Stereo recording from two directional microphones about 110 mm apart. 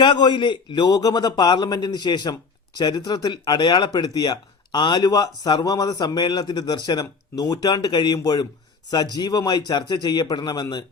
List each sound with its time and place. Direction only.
0.0 s a man's voice: 45° left (ahead or behind)